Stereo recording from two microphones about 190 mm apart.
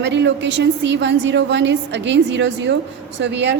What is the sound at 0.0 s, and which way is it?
A woman's voice, 70° right (ahead or behind).